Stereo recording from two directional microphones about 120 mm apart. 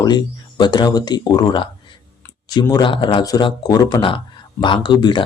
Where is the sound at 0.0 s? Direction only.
35° left (ahead or behind).